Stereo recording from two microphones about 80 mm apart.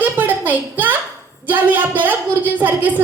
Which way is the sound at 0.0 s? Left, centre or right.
Right.